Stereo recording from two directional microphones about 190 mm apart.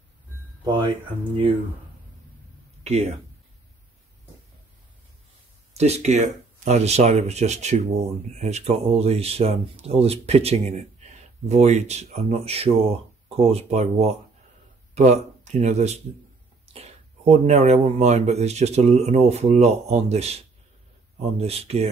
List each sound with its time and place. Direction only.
0.7 s speech: 25° right (ahead or behind)
2.8 s speech: 35° right (ahead or behind)
5.7 s speech: 35° right (ahead or behind)